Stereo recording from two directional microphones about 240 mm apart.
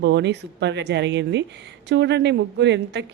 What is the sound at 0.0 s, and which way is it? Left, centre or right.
Speech, right.